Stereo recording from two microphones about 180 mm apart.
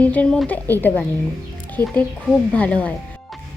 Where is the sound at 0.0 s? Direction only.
10° left (ahead or behind).